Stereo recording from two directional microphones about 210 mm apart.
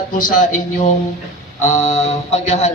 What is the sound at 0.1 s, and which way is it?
A man's voice, 40° left (ahead or behind).